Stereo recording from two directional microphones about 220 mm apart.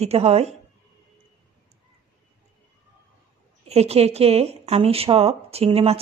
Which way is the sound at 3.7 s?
30° right (ahead or behind).